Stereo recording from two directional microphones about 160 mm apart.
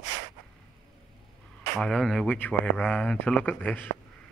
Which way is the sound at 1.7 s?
Centre (ahead or behind).